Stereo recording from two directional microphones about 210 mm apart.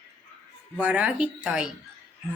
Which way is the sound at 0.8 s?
5° right (ahead or behind).